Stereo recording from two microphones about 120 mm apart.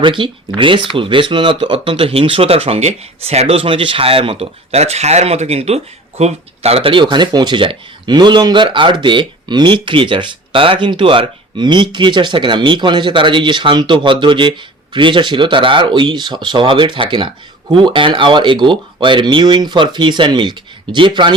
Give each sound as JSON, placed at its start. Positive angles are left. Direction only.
{"t": 0.0, "sound": "speech", "side_deg": -45}